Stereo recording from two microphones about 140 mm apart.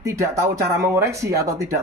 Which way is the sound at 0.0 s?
20° right (ahead or behind).